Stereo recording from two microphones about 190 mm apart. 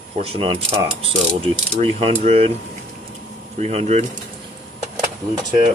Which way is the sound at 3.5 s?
35° right (ahead or behind).